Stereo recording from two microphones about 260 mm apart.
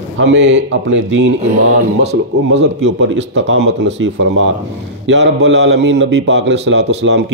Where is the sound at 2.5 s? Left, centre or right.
Right.